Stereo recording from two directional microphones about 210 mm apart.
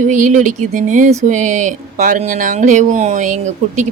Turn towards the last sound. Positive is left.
turn(degrees=-35)  # may be behind; listen again after turning